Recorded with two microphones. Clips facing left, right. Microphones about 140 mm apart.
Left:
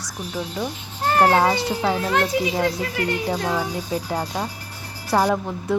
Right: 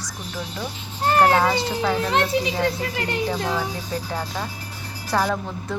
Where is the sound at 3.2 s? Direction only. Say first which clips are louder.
Left 1 dB; 15° left (ahead or behind).